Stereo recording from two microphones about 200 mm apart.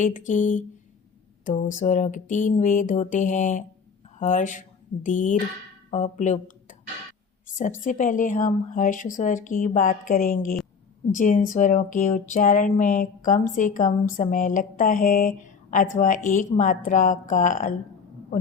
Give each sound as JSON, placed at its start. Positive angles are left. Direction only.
{"t": 0.0, "sound": "speech", "side_deg": 40}
{"t": 1.7, "sound": "speech", "side_deg": 40}